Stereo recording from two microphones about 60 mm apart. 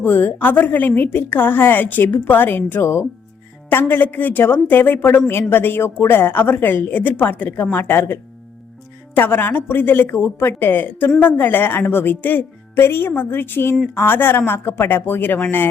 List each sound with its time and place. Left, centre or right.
0.0 s a woman's voice: left
2.8 s speech: left
3.7 s a woman's voice: left
12.7 s a woman's voice: left